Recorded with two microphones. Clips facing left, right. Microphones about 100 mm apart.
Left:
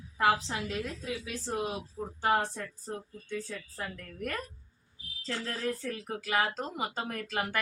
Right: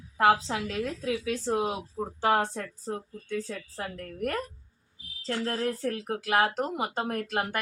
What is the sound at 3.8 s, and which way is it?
Speech, 50° right (ahead or behind).